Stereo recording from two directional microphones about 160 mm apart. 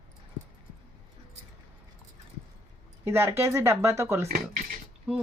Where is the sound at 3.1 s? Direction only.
15° right (ahead or behind).